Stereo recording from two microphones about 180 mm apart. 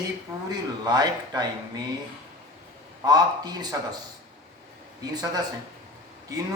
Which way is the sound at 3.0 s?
20° right (ahead or behind).